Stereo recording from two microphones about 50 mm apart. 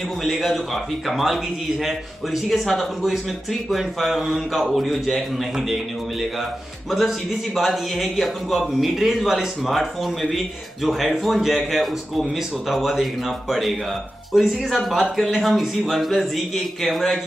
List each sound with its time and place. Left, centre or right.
0.2 s a man's voice: centre
6.9 s a man's voice: centre